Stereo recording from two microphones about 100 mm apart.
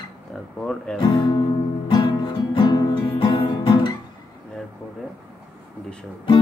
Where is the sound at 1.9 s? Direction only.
50° left (ahead or behind).